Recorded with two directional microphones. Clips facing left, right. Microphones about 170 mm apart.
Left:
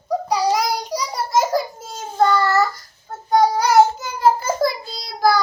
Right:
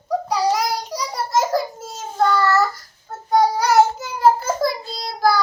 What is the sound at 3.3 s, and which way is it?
Child singing, 5° right (ahead or behind).